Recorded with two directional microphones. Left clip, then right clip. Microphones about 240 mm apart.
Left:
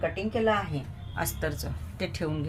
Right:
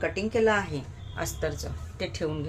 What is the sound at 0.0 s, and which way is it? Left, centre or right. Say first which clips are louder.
Speech: right 2 dB; right.